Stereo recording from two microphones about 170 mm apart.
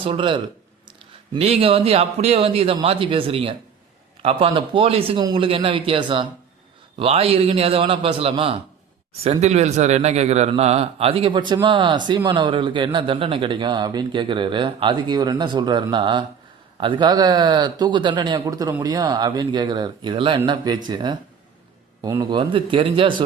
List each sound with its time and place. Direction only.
0.0 s a man's voice: 30° right (ahead or behind)